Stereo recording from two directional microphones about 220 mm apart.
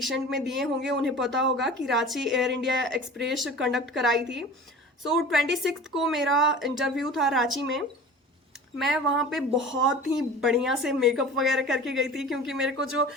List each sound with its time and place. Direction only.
0.0 s a woman's voice: centre (ahead or behind)
8.8 s a woman's voice: centre (ahead or behind)
9.6 s speech: 60° right (ahead or behind)
10.0 s a woman's voice: centre (ahead or behind)